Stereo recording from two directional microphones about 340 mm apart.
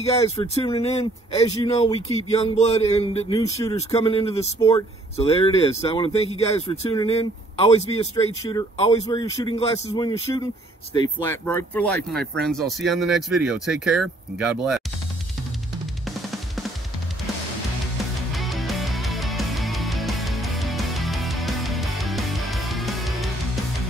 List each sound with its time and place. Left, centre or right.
0.0 s speech: centre
18.3 s music: centre